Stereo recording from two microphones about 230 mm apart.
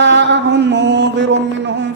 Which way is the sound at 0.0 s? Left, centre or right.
Right.